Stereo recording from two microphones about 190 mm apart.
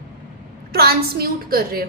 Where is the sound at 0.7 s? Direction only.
55° right (ahead or behind).